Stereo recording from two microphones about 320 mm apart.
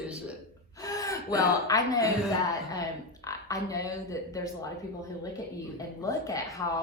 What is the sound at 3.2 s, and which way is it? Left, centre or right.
Speech, centre.